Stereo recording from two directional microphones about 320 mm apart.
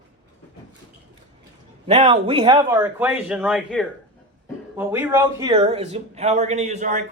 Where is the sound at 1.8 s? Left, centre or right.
Centre.